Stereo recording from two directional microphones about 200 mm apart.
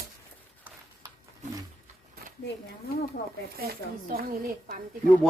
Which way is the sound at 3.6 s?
50° right (ahead or behind).